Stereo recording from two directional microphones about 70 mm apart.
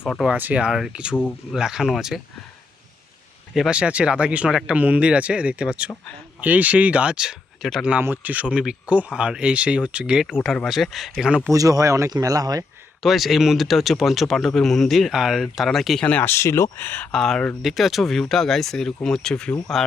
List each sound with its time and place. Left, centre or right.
0.3 s speech: right
0.6 s speech: centre
3.7 s speech: centre
8.0 s speech: right
10.7 s speech: centre
11.5 s speech: right
12.1 s speech: right
13.0 s speech: centre
16.0 s speech: centre
16.2 s speech: left
16.7 s speech: left
17.1 s speech: centre
17.6 s speech: centre